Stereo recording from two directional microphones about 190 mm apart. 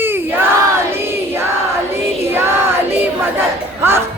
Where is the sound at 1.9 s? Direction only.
10° right (ahead or behind).